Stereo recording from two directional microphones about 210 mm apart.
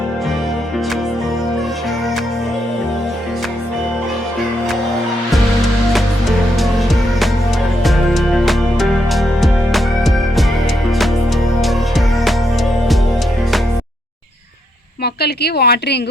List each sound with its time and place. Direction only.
6.6 s music: centre (ahead or behind)
11.6 s music: centre (ahead or behind)
15.0 s a woman's voice: 50° left (ahead or behind)